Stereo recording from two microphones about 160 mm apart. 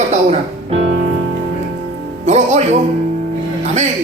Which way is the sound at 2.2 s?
45° right (ahead or behind).